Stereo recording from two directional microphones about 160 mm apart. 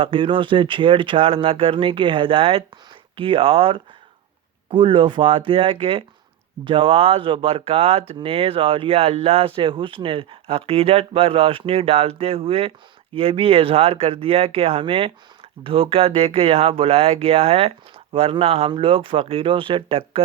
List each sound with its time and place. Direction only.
0.0 s speech: 35° right (ahead or behind)